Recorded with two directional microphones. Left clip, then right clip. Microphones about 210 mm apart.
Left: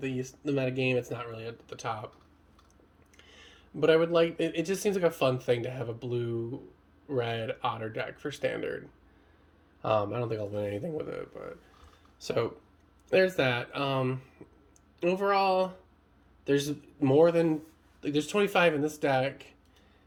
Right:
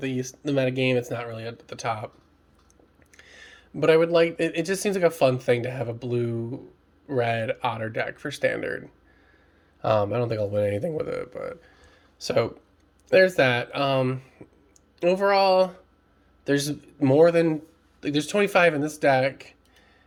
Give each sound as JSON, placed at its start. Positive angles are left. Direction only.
{"t": 0.0, "sound": "speech", "side_deg": -50}
{"t": 3.2, "sound": "speech", "side_deg": -45}
{"t": 9.8, "sound": "speech", "side_deg": -45}